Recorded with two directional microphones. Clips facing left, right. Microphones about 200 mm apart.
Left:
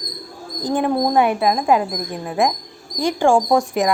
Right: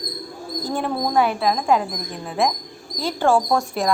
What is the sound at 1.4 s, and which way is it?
A woman's voice, 5° left (ahead or behind).